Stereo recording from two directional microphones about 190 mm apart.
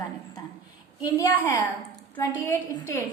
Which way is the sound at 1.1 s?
15° left (ahead or behind).